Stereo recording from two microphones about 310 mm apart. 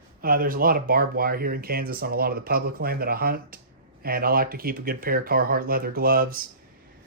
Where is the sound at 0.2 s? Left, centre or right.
Right.